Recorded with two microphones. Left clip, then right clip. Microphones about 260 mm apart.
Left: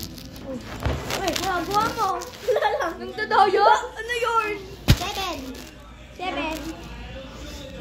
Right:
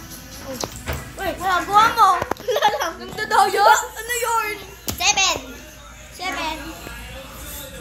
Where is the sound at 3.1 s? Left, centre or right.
Centre.